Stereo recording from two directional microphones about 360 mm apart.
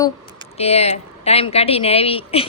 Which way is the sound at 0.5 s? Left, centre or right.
Centre.